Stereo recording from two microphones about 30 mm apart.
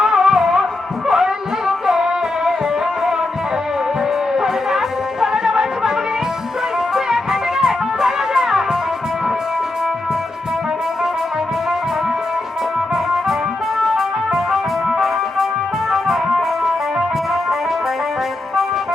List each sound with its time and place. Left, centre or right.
0.0 s music: centre
4.4 s music: right
6.9 s music: centre
13.7 s music: centre